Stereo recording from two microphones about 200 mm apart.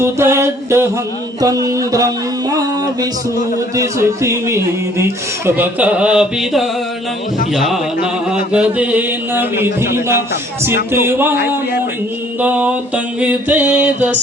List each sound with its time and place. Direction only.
0.0 s a man's voice: 15° right (ahead or behind)
12.4 s a man's voice: 10° right (ahead or behind)